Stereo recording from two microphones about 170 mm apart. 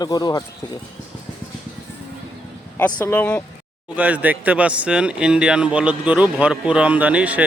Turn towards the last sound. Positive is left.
turn(degrees=-10)  # may be behind; listen again after turning